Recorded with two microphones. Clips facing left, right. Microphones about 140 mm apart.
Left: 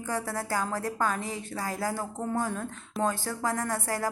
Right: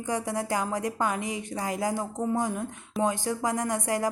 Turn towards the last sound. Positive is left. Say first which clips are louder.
# right 3 dB
turn(degrees=-15)  # may be behind; listen again after turning